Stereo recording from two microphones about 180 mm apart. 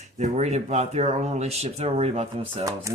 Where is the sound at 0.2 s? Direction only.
40° right (ahead or behind).